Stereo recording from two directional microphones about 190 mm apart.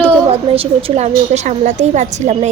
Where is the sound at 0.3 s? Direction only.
30° right (ahead or behind).